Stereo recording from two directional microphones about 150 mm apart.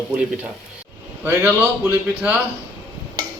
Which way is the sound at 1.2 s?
15° right (ahead or behind).